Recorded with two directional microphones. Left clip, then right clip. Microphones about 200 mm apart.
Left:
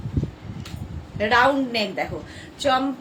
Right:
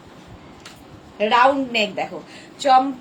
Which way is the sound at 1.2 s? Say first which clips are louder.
Right 2 dB; 20° left (ahead or behind).